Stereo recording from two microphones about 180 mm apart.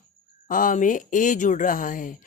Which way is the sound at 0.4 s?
50° left (ahead or behind).